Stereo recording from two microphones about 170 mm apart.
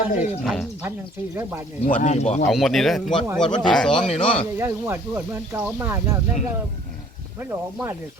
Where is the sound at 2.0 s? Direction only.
40° left (ahead or behind).